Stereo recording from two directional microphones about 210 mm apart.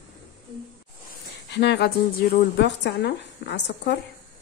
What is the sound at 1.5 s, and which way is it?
A woman's voice, 50° left (ahead or behind).